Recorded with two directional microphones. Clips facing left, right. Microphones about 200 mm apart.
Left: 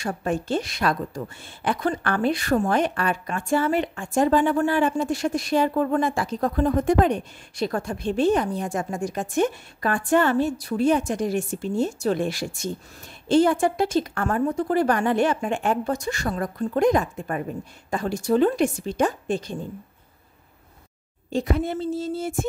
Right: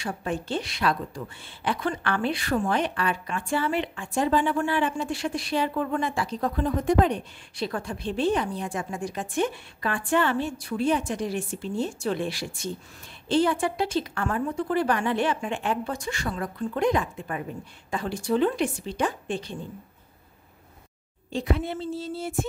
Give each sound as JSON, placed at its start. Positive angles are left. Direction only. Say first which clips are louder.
{"t": 0.0, "sound": "a woman's voice", "louder": "left 4 dB", "side_deg": 45}
{"t": 21.3, "sound": "a woman's voice", "louder": "left 3 dB", "side_deg": 45}